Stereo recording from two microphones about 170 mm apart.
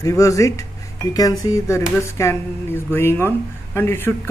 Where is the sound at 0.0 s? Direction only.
20° left (ahead or behind).